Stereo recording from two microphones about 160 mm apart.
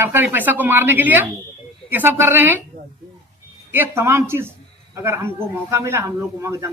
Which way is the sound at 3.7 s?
15° right (ahead or behind).